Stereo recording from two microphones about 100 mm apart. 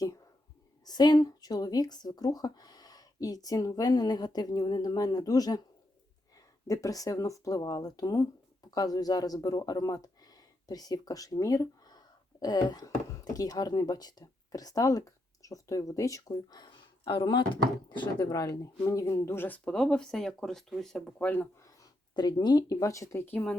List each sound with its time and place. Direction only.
0.9 s speech: 45° left (ahead or behind)
17.0 s speech: 55° left (ahead or behind)
18.3 s speech: 35° left (ahead or behind); by 21.4 s 15° left (ahead or behind)
22.1 s speech: 45° left (ahead or behind)
23.3 s speech: 15° left (ahead or behind)